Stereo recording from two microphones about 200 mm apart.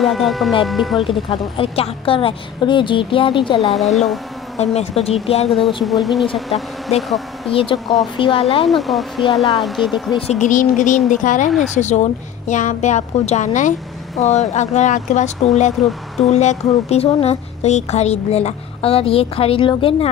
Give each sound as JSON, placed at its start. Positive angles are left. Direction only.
{"t": 0.0, "sound": "speech", "side_deg": 0}
{"t": 1.0, "sound": "a woman's voice", "side_deg": 25}
{"t": 3.7, "sound": "speech", "side_deg": 0}
{"t": 4.6, "sound": "speech", "side_deg": 30}
{"t": 5.9, "sound": "speech", "side_deg": 0}
{"t": 7.5, "sound": "a woman's voice", "side_deg": 25}
{"t": 8.6, "sound": "speech", "side_deg": 0}
{"t": 10.4, "sound": "speech", "side_deg": 40}